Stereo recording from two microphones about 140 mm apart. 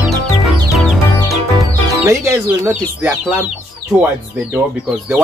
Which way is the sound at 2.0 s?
20° right (ahead or behind).